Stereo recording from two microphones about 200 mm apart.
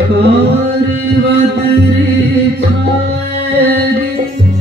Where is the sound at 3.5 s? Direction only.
55° right (ahead or behind).